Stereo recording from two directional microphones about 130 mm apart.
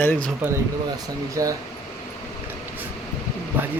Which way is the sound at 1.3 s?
25° right (ahead or behind).